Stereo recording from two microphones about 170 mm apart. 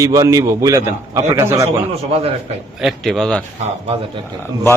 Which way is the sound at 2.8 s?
Centre (ahead or behind).